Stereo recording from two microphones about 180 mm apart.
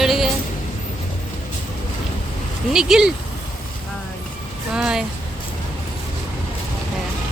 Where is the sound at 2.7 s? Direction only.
5° right (ahead or behind).